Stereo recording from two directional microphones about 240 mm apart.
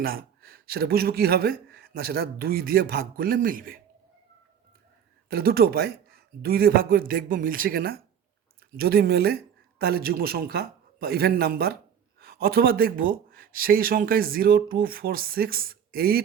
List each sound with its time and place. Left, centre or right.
0.0 s speech: right
5.3 s speech: right